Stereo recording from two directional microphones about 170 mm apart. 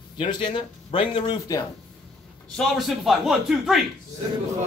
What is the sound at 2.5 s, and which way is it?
Speech, centre (ahead or behind).